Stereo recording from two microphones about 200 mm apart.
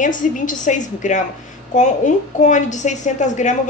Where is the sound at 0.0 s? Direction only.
40° left (ahead or behind).